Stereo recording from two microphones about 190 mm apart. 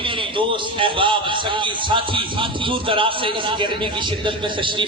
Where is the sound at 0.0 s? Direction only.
25° right (ahead or behind).